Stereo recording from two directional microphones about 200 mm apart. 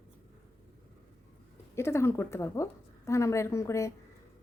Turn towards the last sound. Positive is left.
turn(degrees=15)  # may be behind; listen again after turning